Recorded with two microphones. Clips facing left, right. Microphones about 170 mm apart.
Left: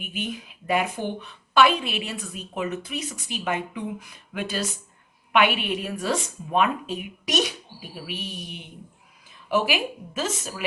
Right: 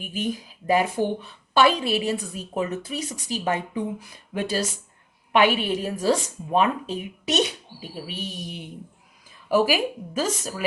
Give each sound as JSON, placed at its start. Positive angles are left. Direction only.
{"t": 0.0, "sound": "a woman's voice", "side_deg": -35}
{"t": 8.4, "sound": "a woman's voice", "side_deg": -40}